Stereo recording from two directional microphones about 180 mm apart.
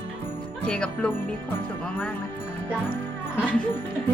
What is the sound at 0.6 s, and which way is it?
Speech, 5° left (ahead or behind).